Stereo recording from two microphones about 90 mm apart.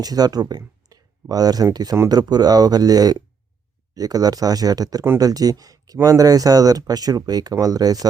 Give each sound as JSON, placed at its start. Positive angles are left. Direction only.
{"t": 0.0, "sound": "speech", "side_deg": -45}